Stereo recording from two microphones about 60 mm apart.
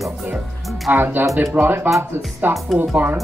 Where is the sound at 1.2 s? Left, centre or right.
Right.